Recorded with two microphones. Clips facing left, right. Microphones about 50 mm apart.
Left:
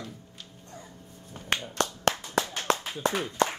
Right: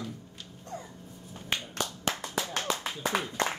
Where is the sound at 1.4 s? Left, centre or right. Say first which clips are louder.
Left 5 dB; left.